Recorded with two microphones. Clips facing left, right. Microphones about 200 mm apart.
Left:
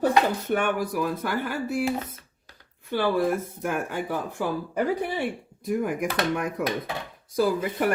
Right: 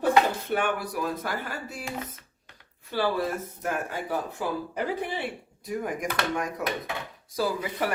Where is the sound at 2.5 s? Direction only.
35° left (ahead or behind).